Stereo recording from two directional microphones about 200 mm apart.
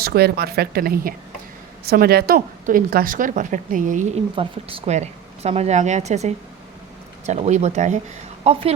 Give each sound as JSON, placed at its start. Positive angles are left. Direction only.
{"t": 0.0, "sound": "a woman's voice", "side_deg": -50}